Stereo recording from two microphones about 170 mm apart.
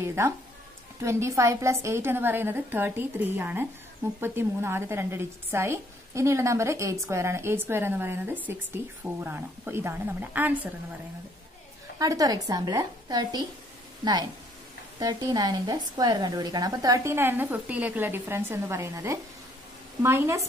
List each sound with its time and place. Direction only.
0.0 s a woman's voice: 15° right (ahead or behind)
12.0 s a woman's voice: 20° right (ahead or behind)